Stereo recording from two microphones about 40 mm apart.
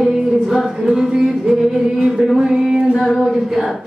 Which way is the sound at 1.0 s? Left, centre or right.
Centre.